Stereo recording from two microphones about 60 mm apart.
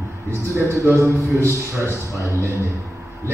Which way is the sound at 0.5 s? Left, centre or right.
Right.